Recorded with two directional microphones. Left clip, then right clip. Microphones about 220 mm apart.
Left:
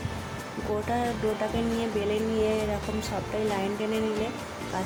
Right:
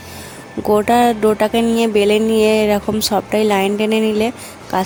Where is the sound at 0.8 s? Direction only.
50° right (ahead or behind).